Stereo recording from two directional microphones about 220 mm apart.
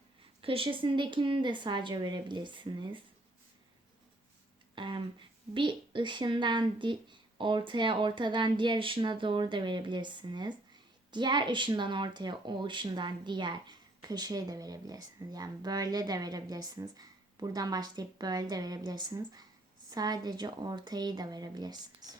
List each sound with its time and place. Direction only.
0.4 s a woman's voice: 25° right (ahead or behind)
4.7 s a sound: 20° right (ahead or behind)
5.5 s a woman's voice: 20° right (ahead or behind)